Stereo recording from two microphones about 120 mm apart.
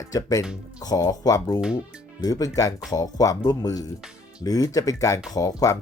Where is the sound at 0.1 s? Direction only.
30° left (ahead or behind).